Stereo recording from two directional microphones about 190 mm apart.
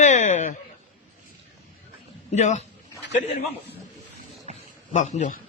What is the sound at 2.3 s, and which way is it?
Speech, 40° left (ahead or behind).